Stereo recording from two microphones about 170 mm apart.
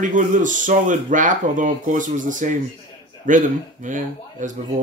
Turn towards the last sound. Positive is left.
turn(degrees=-50)  # may be behind; listen again after turning